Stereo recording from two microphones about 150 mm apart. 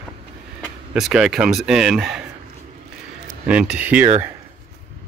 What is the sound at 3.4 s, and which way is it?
Speech, 5° right (ahead or behind).